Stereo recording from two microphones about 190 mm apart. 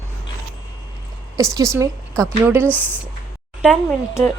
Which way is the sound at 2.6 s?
10° left (ahead or behind).